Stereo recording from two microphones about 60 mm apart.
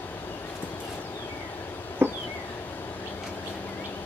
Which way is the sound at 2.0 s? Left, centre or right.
Right.